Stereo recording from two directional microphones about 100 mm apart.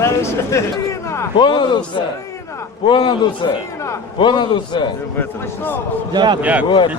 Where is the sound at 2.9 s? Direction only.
50° left (ahead or behind).